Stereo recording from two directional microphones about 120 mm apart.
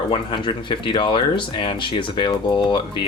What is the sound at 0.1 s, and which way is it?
Speech, 45° left (ahead or behind).